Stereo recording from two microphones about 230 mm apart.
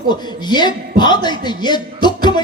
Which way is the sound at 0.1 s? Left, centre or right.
Centre.